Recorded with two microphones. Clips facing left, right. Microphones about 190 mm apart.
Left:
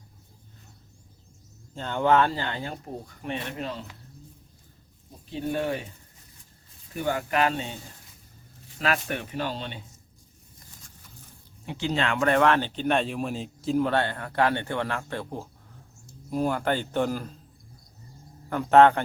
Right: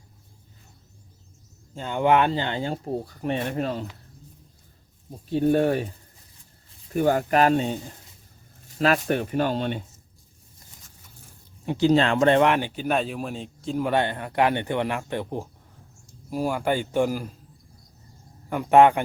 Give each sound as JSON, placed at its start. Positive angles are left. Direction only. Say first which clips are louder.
{"t": 1.7, "sound": "speech", "louder": "right 2 dB", "side_deg": -10}
{"t": 5.3, "sound": "speech", "louder": "right 8 dB", "side_deg": -40}
{"t": 6.9, "sound": "speech", "louder": "right 6 dB", "side_deg": -40}
{"t": 8.8, "sound": "speech", "louder": "right 6 dB", "side_deg": -35}
{"t": 11.6, "sound": "speech", "louder": "right 8 dB", "side_deg": -40}
{"t": 12.2, "sound": "speech", "louder": "right 3 dB", "side_deg": -20}
{"t": 13.8, "sound": "speech", "louder": "right 2 dB", "side_deg": -15}
{"t": 16.3, "sound": "speech", "louder": "right 1 dB", "side_deg": -5}
{"t": 18.4, "sound": "speech", "louder": "right 1 dB", "side_deg": -15}